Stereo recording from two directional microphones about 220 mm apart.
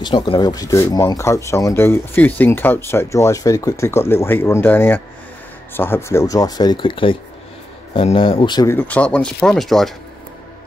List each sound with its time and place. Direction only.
0.0 s speech: 20° left (ahead or behind); by 9.9 s centre (ahead or behind)